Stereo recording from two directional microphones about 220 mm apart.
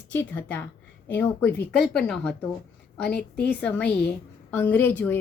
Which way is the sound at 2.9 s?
50° left (ahead or behind).